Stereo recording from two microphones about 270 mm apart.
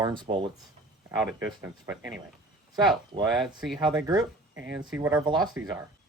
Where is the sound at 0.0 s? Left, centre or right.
Centre.